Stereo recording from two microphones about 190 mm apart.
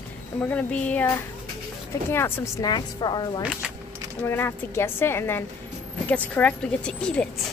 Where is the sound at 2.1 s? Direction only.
15° left (ahead or behind).